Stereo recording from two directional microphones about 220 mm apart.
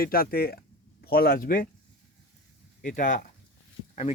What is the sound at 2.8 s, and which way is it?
Speech, 35° left (ahead or behind).